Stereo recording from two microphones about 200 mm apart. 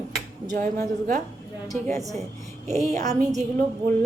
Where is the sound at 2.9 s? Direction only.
35° right (ahead or behind).